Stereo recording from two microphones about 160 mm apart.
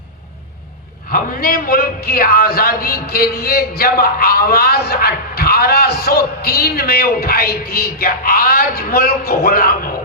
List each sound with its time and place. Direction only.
1.1 s speech: 65° left (ahead or behind)